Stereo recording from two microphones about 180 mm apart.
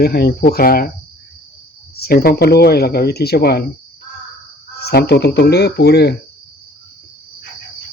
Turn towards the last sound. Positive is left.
turn(degrees=65)  # may be behind; listen again after turning